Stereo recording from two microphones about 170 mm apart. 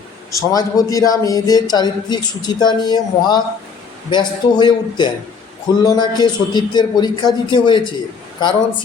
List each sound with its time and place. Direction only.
0.3 s a man's voice: 20° left (ahead or behind)